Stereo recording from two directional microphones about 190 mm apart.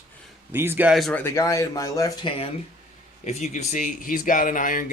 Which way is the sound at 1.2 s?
15° left (ahead or behind).